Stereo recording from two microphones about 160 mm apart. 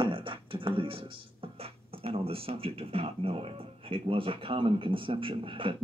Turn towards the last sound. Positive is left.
turn(degrees=-35)  # may be behind; listen again after turning